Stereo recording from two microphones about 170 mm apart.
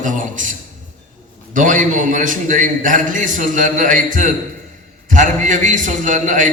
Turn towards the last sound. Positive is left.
turn(degrees=-50)  # may be behind; listen again after turning